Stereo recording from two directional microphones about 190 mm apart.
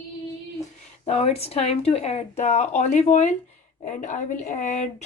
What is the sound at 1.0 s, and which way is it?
Speech, 35° left (ahead or behind).